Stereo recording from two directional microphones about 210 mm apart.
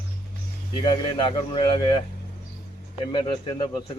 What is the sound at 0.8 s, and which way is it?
Speech, 25° left (ahead or behind).